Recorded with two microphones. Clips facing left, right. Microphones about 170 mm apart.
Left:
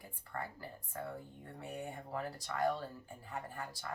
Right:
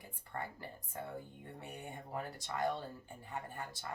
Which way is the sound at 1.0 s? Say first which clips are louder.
Left 1 dB; 25° right (ahead or behind).